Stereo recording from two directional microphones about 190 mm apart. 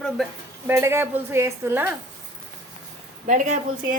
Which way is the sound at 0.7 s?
15° right (ahead or behind).